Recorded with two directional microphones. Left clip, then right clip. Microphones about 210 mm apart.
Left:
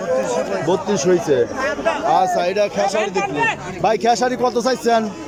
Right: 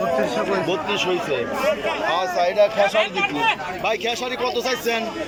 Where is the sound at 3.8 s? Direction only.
25° left (ahead or behind).